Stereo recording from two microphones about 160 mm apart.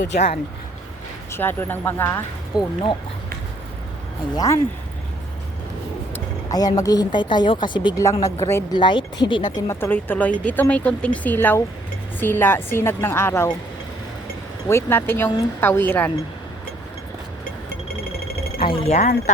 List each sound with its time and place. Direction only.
1.3 s speech: 15° left (ahead or behind)
4.4 s speech: 20° left (ahead or behind)
6.1 s a woman's voice: 25° left (ahead or behind)
8.0 s speech: 20° left (ahead or behind)
8.8 s speech: 30° left (ahead or behind)
14.7 s speech: 15° left (ahead or behind)
18.6 s speech: 35° left (ahead or behind)